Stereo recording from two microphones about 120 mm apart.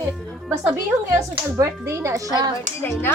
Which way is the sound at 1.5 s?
20° right (ahead or behind).